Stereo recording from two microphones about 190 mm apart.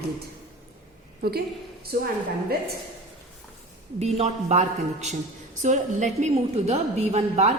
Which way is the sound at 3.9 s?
35° right (ahead or behind).